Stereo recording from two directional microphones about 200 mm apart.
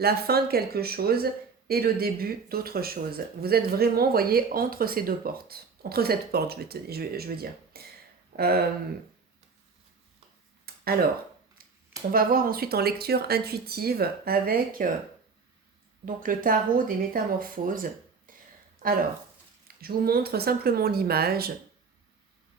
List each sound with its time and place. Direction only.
0.0 s speech: 50° right (ahead or behind)
10.7 s a sound: 50° right (ahead or behind)
12.1 s speech: 45° right (ahead or behind)
16.0 s speech: 45° right (ahead or behind)
18.3 s a sound: 45° right (ahead or behind)
19.6 s speech: 50° right (ahead or behind)